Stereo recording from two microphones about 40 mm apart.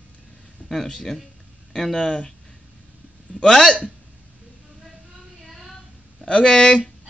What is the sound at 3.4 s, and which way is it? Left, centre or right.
Speech, centre.